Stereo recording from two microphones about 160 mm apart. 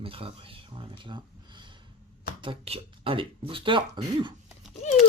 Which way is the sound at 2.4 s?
35° right (ahead or behind).